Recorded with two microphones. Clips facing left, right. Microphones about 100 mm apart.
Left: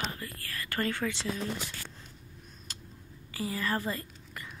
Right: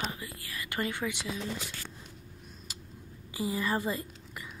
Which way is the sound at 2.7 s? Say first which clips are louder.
Left 2 dB; 10° right (ahead or behind).